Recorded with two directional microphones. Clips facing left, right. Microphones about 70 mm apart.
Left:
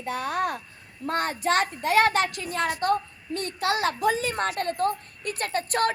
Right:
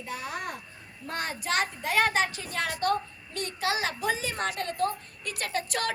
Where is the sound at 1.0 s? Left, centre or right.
Left.